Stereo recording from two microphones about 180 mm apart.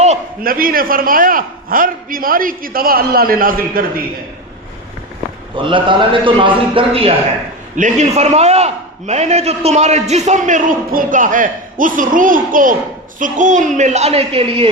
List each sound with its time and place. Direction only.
0.4 s a man's voice: 55° right (ahead or behind)
5.6 s a man's voice: 25° right (ahead or behind)
7.8 s a man's voice: 40° right (ahead or behind)